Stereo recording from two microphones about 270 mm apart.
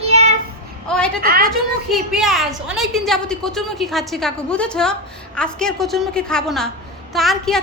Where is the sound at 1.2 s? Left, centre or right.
Right.